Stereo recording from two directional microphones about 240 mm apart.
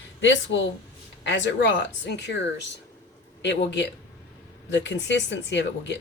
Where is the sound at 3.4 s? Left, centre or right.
Left.